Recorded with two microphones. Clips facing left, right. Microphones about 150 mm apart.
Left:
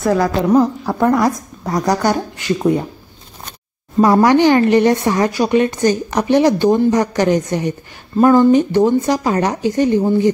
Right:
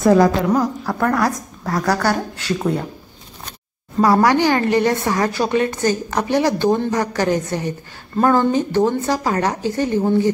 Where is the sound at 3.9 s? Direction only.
20° left (ahead or behind).